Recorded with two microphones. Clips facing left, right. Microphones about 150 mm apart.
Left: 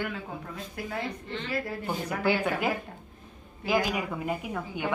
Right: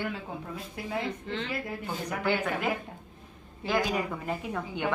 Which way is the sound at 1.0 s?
90° right.